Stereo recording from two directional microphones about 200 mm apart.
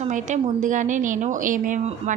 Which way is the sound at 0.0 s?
40° right (ahead or behind).